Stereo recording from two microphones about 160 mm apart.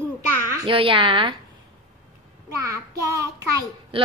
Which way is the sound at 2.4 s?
20° right (ahead or behind).